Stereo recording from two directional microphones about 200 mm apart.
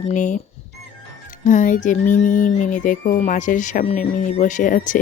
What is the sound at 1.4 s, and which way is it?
Music, 40° left (ahead or behind).